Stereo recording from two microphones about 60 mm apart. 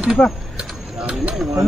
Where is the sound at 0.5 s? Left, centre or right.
Centre.